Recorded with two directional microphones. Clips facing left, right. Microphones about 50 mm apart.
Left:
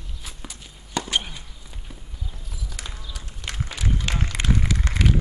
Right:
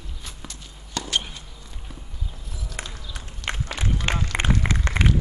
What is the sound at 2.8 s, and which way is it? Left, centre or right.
Run, right.